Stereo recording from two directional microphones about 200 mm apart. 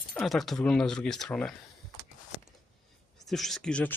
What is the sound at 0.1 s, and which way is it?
Speech, centre (ahead or behind).